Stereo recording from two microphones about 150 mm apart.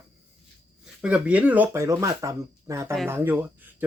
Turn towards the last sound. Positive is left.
turn(degrees=-10)  # may be behind; listen again after turning